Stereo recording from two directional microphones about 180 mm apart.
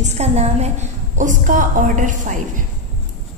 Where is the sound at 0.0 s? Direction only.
40° right (ahead or behind).